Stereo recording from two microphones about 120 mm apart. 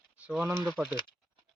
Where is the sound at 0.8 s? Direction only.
10° right (ahead or behind).